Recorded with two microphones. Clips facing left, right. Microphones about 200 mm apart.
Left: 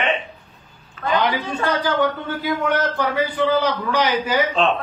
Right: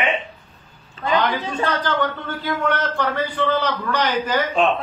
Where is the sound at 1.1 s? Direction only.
15° left (ahead or behind).